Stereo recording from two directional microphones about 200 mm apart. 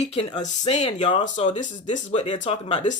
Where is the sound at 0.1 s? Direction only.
30° left (ahead or behind).